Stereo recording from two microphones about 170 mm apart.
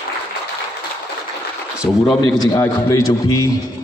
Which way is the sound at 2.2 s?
20° left (ahead or behind).